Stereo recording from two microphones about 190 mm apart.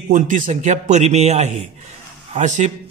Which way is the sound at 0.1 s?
45° right (ahead or behind).